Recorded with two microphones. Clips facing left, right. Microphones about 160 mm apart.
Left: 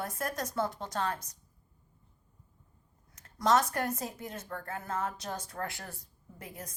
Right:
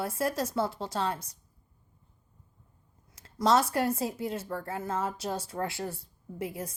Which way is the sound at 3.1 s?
30° right (ahead or behind).